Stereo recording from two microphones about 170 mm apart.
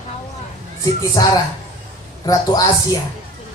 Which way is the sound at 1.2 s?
20° left (ahead or behind).